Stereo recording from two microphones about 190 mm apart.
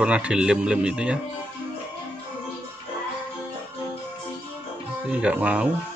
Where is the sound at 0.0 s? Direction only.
5° right (ahead or behind).